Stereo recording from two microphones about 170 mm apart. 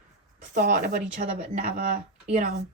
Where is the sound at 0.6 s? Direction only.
50° right (ahead or behind).